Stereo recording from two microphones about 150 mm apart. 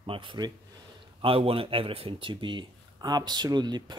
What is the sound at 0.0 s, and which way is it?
Speech, 35° right (ahead or behind).